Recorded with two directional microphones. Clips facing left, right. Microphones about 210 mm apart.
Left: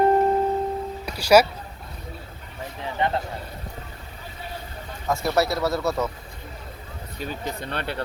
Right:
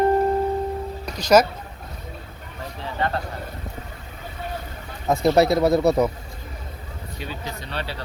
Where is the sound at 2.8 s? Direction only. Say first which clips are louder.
Left 1 dB; 20° left (ahead or behind).